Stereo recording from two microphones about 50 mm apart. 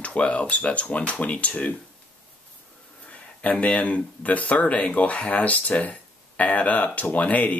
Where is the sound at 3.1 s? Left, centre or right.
Left.